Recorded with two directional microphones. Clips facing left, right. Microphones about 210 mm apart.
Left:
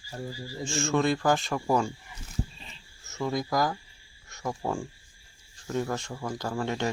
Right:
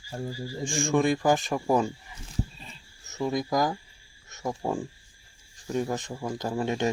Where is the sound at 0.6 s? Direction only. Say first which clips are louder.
Right 2 dB; 15° right (ahead or behind).